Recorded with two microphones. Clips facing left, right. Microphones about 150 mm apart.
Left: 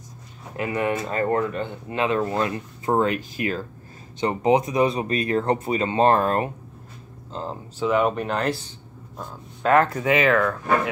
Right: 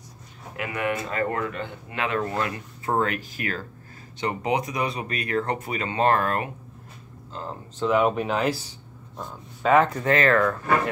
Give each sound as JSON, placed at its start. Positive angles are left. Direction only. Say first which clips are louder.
{"t": 0.6, "sound": "speech", "louder": "left 3 dB", "side_deg": 30}
{"t": 7.8, "sound": "speech", "louder": "even", "side_deg": 0}